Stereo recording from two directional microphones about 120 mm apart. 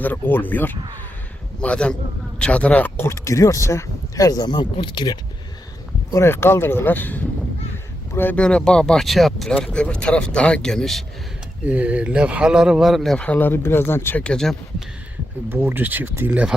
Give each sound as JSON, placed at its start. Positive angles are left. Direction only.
{"t": 0.0, "sound": "speech", "side_deg": 15}
{"t": 6.1, "sound": "speech", "side_deg": 20}
{"t": 11.6, "sound": "speech", "side_deg": -10}
{"t": 15.4, "sound": "speech", "side_deg": -15}